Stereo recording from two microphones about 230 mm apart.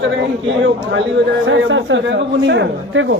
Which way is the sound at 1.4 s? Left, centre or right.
Right.